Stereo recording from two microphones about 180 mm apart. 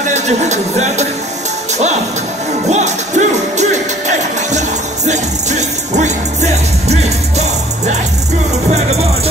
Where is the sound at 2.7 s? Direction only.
40° right (ahead or behind).